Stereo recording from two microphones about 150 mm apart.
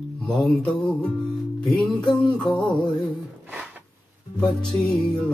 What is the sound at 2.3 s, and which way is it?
Music, 5° left (ahead or behind).